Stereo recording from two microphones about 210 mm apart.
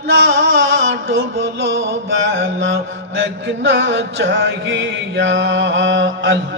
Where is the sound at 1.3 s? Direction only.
65° right (ahead or behind).